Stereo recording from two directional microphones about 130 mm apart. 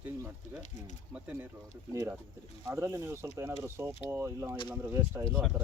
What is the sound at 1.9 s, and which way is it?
Speech, 25° right (ahead or behind).